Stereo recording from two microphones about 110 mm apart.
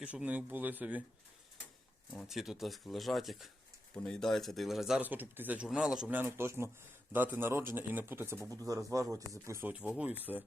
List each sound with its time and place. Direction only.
0.0 s speech: 10° right (ahead or behind)
2.2 s speech: 5° right (ahead or behind)
5.0 s speech: 15° right (ahead or behind)
5.6 s speech: 5° right (ahead or behind)
6.1 s speech: 20° right (ahead or behind)
9.6 s speech: 15° right (ahead or behind)